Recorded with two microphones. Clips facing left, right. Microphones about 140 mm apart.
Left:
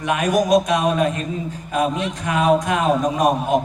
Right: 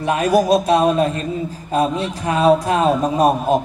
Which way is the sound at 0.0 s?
30° right (ahead or behind).